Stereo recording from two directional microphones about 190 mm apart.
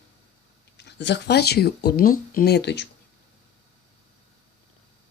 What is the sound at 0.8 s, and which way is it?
Speech, 65° left (ahead or behind).